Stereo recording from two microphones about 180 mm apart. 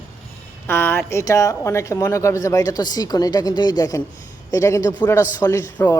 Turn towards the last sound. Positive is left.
turn(degrees=15)  # may be behind; listen again after turning